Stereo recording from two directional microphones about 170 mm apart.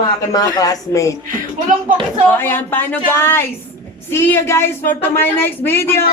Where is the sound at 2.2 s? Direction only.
10° left (ahead or behind).